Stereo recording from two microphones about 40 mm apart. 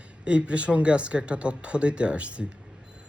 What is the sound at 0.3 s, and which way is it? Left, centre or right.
Speech, right.